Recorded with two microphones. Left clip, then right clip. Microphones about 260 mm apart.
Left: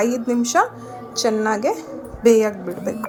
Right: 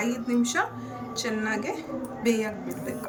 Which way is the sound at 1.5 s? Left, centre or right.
Centre.